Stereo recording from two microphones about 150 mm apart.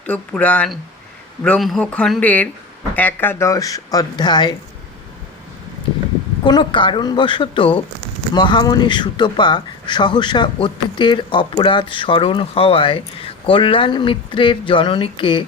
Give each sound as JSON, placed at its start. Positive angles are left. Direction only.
{"t": 0.0, "sound": "speech", "side_deg": 10}
{"t": 6.4, "sound": "speech", "side_deg": 30}